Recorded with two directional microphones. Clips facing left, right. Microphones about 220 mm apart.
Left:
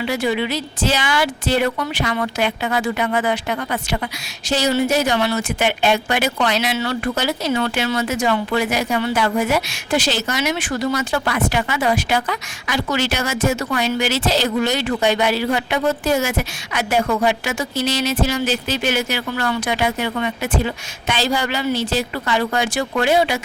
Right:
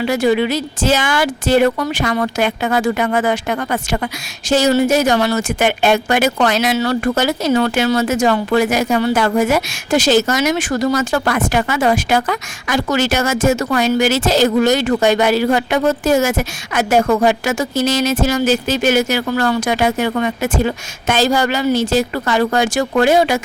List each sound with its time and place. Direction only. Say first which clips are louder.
0.0 s speech: right 6 dB; 45° right (ahead or behind)